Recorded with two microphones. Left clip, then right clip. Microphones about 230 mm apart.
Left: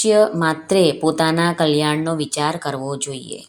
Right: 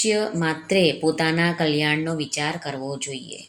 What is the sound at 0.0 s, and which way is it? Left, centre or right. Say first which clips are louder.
Speech: left 8 dB; centre.